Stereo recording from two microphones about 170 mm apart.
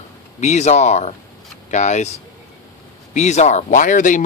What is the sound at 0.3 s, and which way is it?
Speech, 40° left (ahead or behind).